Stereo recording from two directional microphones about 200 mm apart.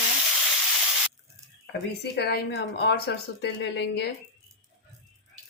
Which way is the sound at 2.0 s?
55° left (ahead or behind).